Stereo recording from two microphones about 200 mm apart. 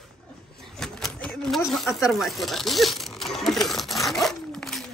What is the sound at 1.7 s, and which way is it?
Speech, centre (ahead or behind).